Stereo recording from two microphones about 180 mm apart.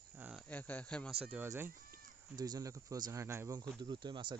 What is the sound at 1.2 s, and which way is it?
Speech, 10° right (ahead or behind).